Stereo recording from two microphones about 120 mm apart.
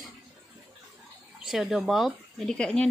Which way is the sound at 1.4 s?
5° right (ahead or behind).